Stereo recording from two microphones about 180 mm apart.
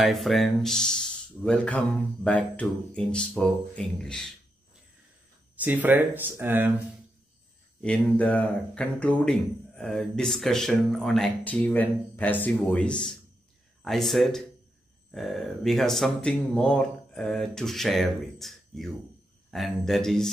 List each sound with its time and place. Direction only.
0.0 s speech: centre (ahead or behind)
5.6 s speech: 10° right (ahead or behind)
7.8 s speech: 5° left (ahead or behind)